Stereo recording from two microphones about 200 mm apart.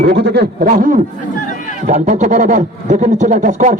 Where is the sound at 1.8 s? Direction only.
40° right (ahead or behind).